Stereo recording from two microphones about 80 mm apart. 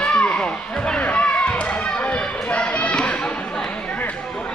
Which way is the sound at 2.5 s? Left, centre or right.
Centre.